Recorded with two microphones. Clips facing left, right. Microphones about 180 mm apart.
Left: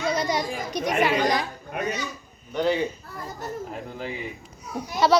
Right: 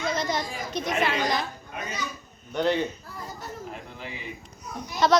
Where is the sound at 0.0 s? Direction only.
10° left (ahead or behind).